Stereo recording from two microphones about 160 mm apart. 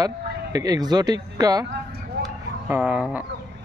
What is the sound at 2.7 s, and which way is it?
Speech, 10° right (ahead or behind).